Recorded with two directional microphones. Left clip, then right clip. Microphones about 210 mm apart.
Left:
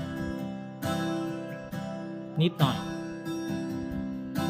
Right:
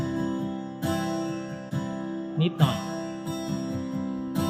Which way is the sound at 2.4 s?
20° left (ahead or behind).